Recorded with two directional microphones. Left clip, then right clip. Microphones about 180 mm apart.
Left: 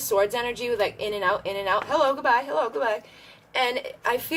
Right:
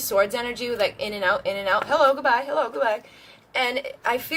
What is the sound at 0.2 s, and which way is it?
Speech, 15° left (ahead or behind).